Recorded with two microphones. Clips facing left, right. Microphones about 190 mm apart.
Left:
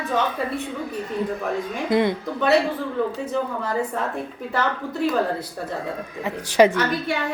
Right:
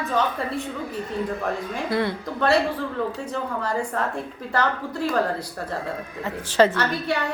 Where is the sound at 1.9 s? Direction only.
20° left (ahead or behind).